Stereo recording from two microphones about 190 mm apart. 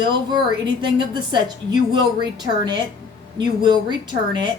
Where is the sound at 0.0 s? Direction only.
25° right (ahead or behind).